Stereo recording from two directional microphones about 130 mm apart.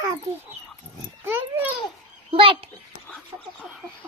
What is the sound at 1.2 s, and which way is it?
Dog, 15° right (ahead or behind).